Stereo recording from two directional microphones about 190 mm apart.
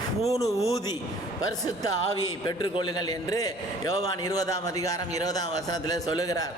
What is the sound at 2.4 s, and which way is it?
A man's voice, 25° left (ahead or behind).